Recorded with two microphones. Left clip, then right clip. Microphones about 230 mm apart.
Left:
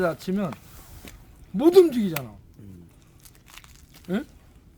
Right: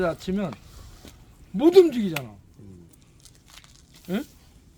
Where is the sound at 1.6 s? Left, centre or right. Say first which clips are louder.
Even; centre.